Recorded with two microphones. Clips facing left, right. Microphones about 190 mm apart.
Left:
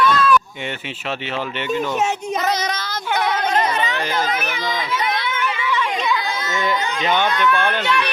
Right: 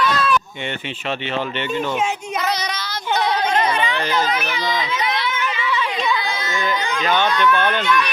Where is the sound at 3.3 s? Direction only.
40° left (ahead or behind).